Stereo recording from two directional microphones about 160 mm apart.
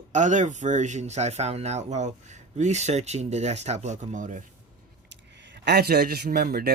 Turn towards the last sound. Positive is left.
turn(degrees=-75)  # may be behind; listen again after turning